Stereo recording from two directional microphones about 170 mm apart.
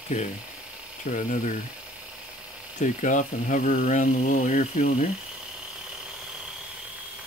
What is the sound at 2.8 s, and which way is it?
Speech, 45° left (ahead or behind).